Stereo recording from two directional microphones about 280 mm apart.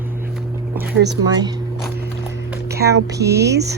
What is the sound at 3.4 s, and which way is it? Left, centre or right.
Speech, right.